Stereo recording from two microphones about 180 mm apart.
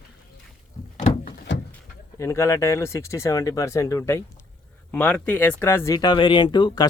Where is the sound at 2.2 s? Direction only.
15° left (ahead or behind).